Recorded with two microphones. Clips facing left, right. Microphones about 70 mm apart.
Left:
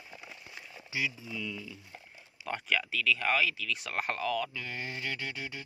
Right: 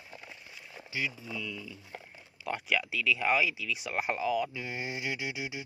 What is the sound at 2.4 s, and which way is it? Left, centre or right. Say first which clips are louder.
Speech: right 1 dB; centre.